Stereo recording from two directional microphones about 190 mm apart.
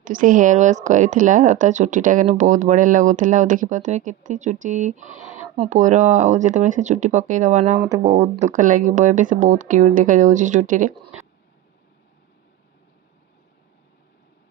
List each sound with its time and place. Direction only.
0.0 s a woman's voice: 45° right (ahead or behind)